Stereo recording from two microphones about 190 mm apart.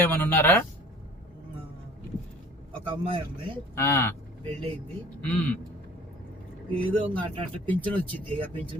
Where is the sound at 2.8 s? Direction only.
25° right (ahead or behind).